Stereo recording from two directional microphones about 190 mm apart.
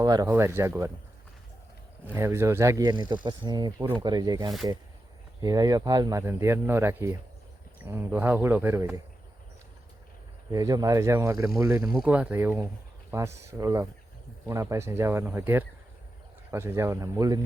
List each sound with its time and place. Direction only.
0.0 s speech: 20° right (ahead or behind)
2.1 s speech: 15° right (ahead or behind)
10.5 s speech: 20° right (ahead or behind)